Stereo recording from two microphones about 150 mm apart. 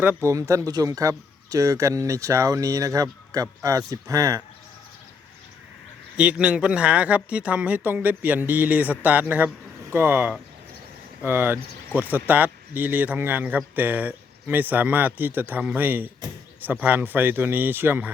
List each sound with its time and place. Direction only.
0.0 s speech: 15° right (ahead or behind)
6.1 s speech: 10° right (ahead or behind)